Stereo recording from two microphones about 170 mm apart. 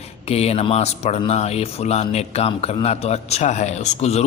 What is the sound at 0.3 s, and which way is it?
A man's voice, 35° left (ahead or behind).